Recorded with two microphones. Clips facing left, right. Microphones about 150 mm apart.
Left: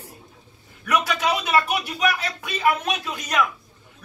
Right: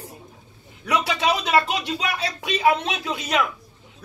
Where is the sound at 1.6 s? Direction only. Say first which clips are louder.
Left 2 dB; 25° right (ahead or behind).